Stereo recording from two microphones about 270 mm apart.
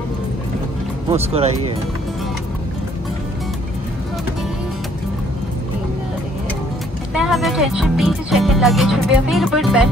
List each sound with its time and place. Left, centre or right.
1.0 s speech: right
7.2 s speech: centre